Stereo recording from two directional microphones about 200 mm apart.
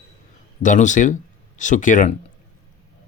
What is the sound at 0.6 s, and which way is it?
Speech, 40° left (ahead or behind).